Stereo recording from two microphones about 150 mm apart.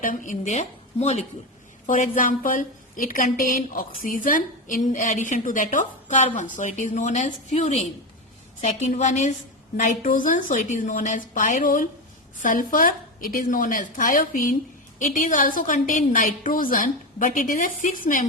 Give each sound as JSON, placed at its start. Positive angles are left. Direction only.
{"t": 0.0, "sound": "a woman's voice", "side_deg": 60}
{"t": 1.9, "sound": "a woman's voice", "side_deg": 65}
{"t": 9.7, "sound": "a woman's voice", "side_deg": 65}